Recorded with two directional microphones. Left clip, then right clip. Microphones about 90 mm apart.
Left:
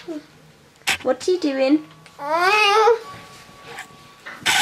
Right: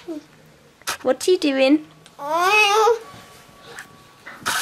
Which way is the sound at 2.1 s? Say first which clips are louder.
Even; 20° right (ahead or behind).